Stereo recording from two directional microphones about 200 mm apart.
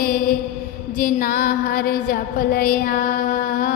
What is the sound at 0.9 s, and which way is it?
Music, 45° left (ahead or behind).